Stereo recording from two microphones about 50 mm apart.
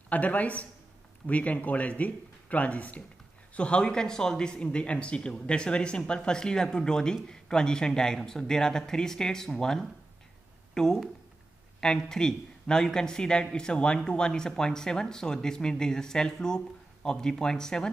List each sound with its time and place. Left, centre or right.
0.1 s speech: left; by 9.8 s centre
10.7 s a sound: centre
11.8 s speech: centre